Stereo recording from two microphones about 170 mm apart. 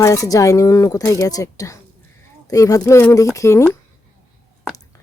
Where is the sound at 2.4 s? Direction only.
20° left (ahead or behind).